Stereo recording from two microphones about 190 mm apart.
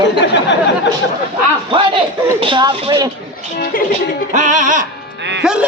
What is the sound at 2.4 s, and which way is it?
Speech, 25° right (ahead or behind).